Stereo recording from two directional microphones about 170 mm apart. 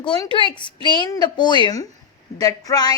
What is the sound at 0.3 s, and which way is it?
A woman's voice, 30° left (ahead or behind).